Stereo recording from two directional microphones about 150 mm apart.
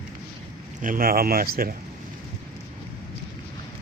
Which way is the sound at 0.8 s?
70° right (ahead or behind).